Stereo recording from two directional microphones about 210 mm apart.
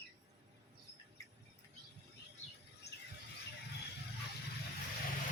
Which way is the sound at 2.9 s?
55° left (ahead or behind).